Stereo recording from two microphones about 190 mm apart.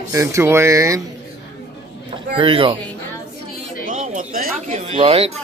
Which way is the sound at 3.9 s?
45° right (ahead or behind).